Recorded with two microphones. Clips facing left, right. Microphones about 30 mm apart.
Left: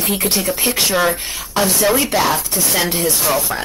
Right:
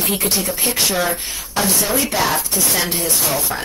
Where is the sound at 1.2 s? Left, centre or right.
Left.